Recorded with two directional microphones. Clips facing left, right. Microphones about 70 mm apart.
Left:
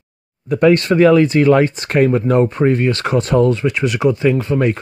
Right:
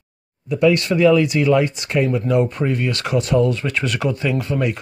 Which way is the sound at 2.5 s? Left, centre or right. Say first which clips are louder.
Left 6 dB; left.